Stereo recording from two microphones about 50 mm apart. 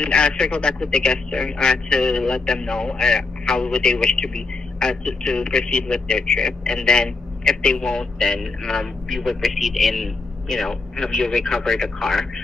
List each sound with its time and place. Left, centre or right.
0.0 s a man's voice: left